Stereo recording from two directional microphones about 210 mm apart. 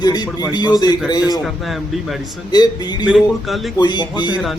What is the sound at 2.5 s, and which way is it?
Speech, 20° left (ahead or behind).